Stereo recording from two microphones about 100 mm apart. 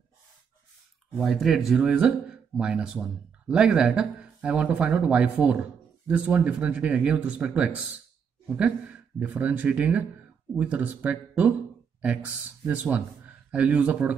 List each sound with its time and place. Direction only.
1.1 s speech: centre (ahead or behind)